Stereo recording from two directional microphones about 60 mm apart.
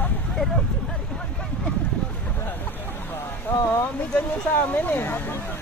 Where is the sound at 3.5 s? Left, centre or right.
Left.